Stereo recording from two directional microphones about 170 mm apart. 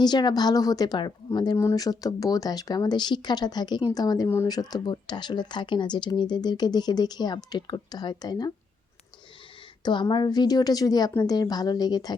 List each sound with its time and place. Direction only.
0.0 s a woman's voice: 25° left (ahead or behind)
9.8 s a woman's voice: 25° left (ahead or behind)